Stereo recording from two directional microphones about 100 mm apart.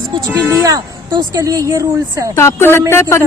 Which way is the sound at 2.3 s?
25° left (ahead or behind).